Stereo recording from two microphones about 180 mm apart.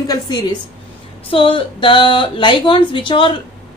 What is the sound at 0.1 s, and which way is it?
A woman's voice, 20° left (ahead or behind).